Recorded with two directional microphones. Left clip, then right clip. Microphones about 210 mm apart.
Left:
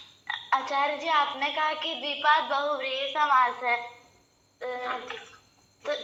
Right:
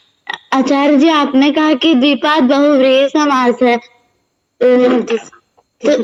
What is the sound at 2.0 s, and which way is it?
A man's voice, 70° right (ahead or behind).